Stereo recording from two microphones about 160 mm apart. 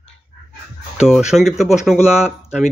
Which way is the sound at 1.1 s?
5° right (ahead or behind).